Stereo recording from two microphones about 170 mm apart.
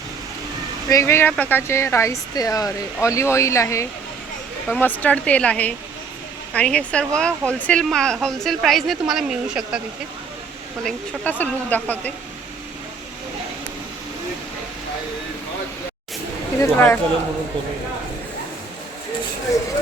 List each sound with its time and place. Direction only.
0.9 s speech: 15° left (ahead or behind); by 9.8 s 5° right (ahead or behind)
10.8 s speech: 10° left (ahead or behind)
16.6 s speech: 15° left (ahead or behind)